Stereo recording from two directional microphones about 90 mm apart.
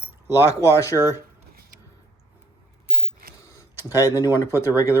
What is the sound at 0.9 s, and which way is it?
Speech, 30° right (ahead or behind).